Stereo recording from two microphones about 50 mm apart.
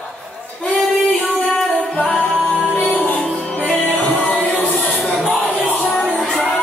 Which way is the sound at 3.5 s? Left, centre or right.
Left.